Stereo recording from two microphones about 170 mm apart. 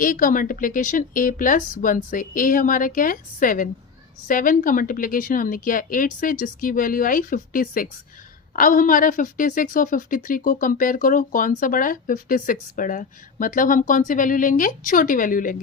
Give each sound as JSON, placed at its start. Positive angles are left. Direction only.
{"t": 0.0, "sound": "a woman's voice", "side_deg": 50}